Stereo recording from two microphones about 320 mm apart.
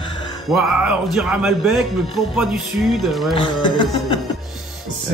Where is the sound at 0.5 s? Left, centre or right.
Centre.